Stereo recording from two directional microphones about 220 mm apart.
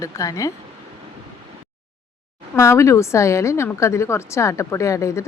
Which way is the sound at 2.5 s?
15° left (ahead or behind).